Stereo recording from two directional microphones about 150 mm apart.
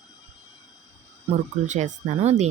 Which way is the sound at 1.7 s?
50° right (ahead or behind).